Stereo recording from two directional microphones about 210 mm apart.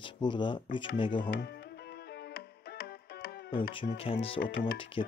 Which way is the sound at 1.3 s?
50° left (ahead or behind).